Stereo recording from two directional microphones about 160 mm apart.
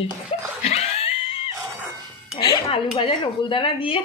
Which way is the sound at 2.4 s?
25° left (ahead or behind).